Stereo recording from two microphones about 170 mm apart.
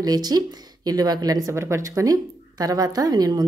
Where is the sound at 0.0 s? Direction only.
25° right (ahead or behind).